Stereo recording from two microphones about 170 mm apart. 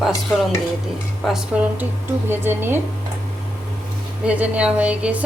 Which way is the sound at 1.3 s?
10° right (ahead or behind).